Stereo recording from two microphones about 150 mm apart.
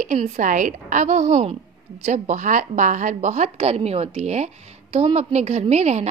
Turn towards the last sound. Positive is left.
turn(degrees=-45)  # may be behind; listen again after turning